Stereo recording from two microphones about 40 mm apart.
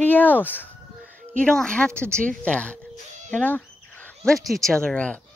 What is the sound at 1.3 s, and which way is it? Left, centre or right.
Speech, centre.